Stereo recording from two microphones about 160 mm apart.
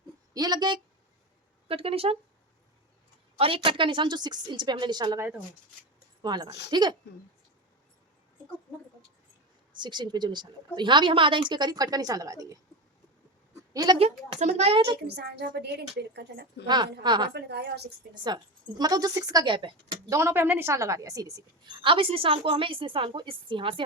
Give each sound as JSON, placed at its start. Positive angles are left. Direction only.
{"t": 0.3, "sound": "speech", "side_deg": -25}
{"t": 1.6, "sound": "a woman's voice", "side_deg": -35}
{"t": 3.3, "sound": "a woman's voice", "side_deg": -35}
{"t": 6.2, "sound": "a woman's voice", "side_deg": -25}
{"t": 9.7, "sound": "a woman's voice", "side_deg": -30}
{"t": 13.7, "sound": "a woman's voice", "side_deg": -25}
{"t": 14.0, "sound": "a woman's voice", "side_deg": -40}
{"t": 15.0, "sound": "a woman's voice", "side_deg": -90}
{"t": 16.6, "sound": "a woman's voice", "side_deg": -25}
{"t": 17.3, "sound": "a woman's voice", "side_deg": -90}
{"t": 18.1, "sound": "a woman's voice", "side_deg": -30}
{"t": 20.1, "sound": "a woman's voice", "side_deg": -15}